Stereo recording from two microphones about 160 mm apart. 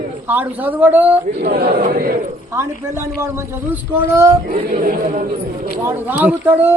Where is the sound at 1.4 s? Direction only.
70° right (ahead or behind).